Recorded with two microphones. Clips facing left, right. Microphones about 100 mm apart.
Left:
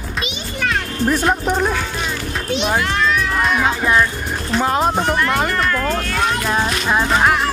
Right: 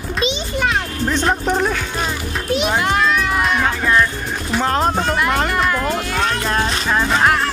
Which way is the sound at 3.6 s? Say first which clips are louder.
Even; 10° left (ahead or behind).